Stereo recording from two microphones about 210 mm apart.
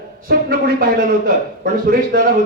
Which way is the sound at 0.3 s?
45° right (ahead or behind).